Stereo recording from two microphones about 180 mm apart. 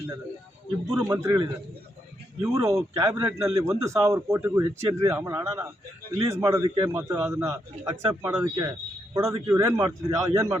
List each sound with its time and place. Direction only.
1.1 s a man's voice: 20° right (ahead or behind)